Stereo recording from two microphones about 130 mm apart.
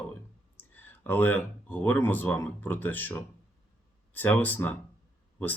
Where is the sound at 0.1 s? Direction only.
15° left (ahead or behind).